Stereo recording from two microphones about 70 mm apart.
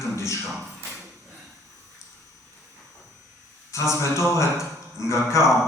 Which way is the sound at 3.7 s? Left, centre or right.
Left.